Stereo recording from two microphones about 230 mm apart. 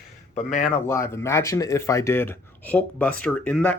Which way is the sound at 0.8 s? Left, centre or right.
Centre.